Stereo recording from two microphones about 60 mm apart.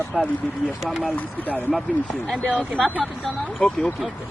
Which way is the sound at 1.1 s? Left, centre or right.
Left.